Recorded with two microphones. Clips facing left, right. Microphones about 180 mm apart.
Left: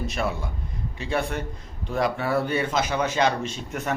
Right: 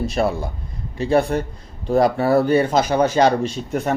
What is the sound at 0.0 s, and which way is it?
Speech, 35° right (ahead or behind).